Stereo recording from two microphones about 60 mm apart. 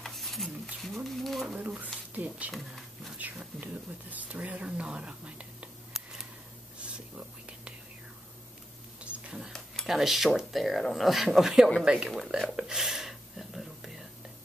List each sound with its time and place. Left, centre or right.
0.0 s stir: centre
0.8 s speech: centre
2.1 s speech: right
3.2 s a sound: right
3.6 s speech: right
6.8 s whispering: centre
9.0 s a sound: right
9.5 s speech: centre
12.5 s whispering: centre